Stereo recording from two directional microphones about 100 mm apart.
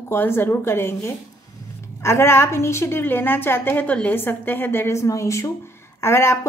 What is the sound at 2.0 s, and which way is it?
A woman's voice, 25° left (ahead or behind).